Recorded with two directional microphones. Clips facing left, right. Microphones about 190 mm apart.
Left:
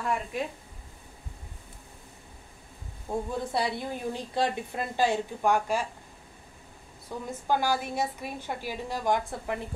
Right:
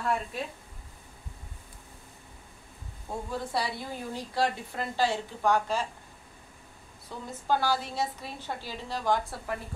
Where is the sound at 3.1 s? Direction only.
15° left (ahead or behind).